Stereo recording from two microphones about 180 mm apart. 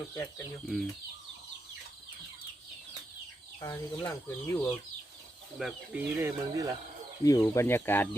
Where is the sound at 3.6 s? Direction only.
15° left (ahead or behind).